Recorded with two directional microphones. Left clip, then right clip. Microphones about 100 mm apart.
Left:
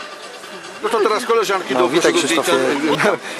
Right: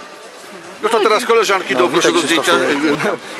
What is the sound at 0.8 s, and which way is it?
Speech, 20° right (ahead or behind).